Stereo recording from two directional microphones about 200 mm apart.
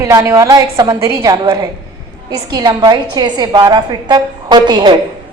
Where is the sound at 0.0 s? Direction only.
15° right (ahead or behind).